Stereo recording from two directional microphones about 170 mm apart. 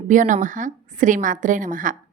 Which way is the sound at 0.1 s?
50° right (ahead or behind).